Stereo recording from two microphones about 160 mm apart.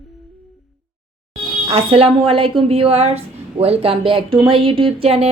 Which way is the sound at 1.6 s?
40° right (ahead or behind).